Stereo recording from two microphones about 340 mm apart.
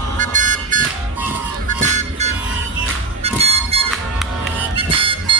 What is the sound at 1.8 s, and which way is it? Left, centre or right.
Music, right.